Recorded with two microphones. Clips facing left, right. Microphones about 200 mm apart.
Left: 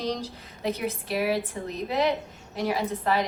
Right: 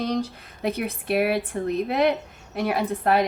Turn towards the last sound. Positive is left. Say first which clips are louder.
# right 4 dB
turn(degrees=-55)  # may be behind; listen again after turning